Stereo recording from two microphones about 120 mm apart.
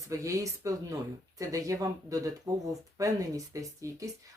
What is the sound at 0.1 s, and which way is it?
Speech, 25° right (ahead or behind).